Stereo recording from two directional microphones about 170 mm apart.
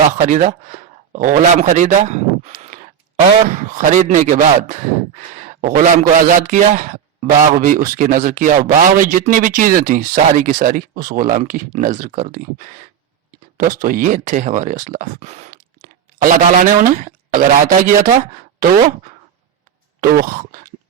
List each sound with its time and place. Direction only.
0.3 s a man's voice: 45° right (ahead or behind)
15.4 s speech: 50° right (ahead or behind)
20.0 s a sound: 55° right (ahead or behind)